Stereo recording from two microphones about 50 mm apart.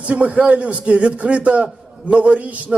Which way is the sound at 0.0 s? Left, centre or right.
Right.